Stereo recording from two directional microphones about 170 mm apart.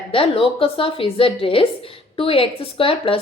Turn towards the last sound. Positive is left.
turn(degrees=35)  # may be behind; listen again after turning